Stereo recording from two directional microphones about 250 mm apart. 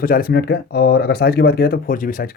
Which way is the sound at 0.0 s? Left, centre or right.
Left.